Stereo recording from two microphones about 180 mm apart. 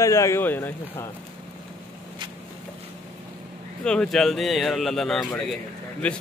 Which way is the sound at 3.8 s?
5° left (ahead or behind).